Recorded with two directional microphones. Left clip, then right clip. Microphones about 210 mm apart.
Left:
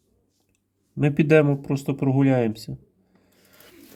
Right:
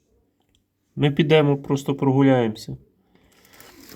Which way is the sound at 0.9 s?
10° left (ahead or behind).